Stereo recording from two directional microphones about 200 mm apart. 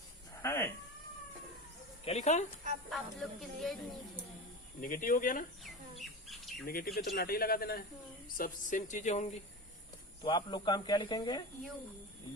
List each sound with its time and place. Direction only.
0.4 s cat: 15° left (ahead or behind)
2.0 s speech: 35° left (ahead or behind)
2.9 s speech: centre (ahead or behind)
4.8 s speech: 45° left (ahead or behind)
6.0 s squawk: centre (ahead or behind)
6.7 s speech: 50° left (ahead or behind)
10.2 s speech: 20° left (ahead or behind)